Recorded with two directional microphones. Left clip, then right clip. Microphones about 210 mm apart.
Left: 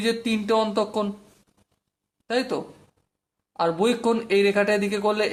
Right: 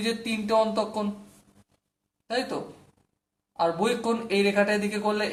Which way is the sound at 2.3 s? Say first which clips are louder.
Left 4 dB; 45° left (ahead or behind).